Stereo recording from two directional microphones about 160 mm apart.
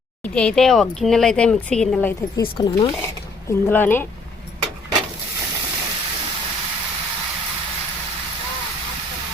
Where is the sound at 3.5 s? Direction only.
15° left (ahead or behind).